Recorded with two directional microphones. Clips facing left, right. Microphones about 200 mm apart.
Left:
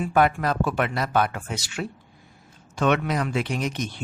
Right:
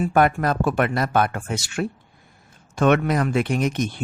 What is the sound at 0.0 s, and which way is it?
Speech, 50° right (ahead or behind).